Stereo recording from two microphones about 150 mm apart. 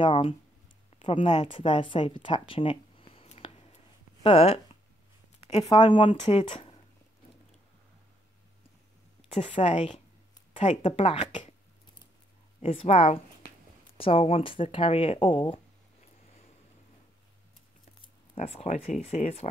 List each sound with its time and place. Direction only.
0.0 s speech: 35° left (ahead or behind)
1.5 s speech: 35° left (ahead or behind)
9.3 s speech: 40° left (ahead or behind)
10.5 s speech: 50° left (ahead or behind)
12.6 s speech: 40° left (ahead or behind)
18.0 s speech: 40° left (ahead or behind)